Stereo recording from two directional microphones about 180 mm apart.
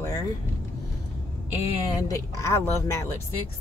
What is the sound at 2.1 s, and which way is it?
Speech, 15° left (ahead or behind).